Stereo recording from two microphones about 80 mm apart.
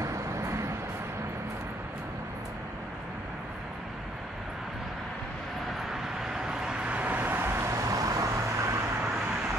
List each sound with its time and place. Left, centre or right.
0.0 s vehicle: right
6.2 s vehicle: centre; by 8.7 s right